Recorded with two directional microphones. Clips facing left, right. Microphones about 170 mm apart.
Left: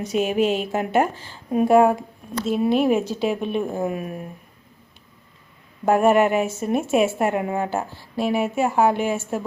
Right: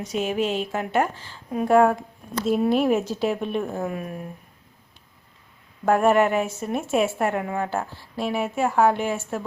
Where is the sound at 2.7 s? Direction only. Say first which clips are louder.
Left 2 dB; centre (ahead or behind).